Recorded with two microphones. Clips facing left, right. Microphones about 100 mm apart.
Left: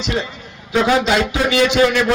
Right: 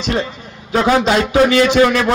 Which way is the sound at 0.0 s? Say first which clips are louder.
Right 3 dB; 40° right (ahead or behind).